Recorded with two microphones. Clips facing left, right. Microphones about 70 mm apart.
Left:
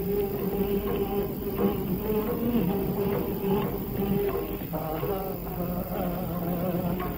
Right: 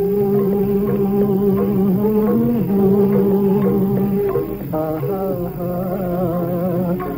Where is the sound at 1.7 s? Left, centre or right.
Right.